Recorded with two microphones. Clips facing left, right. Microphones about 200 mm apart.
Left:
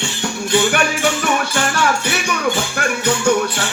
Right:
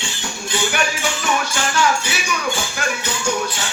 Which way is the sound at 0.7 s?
60° left (ahead or behind).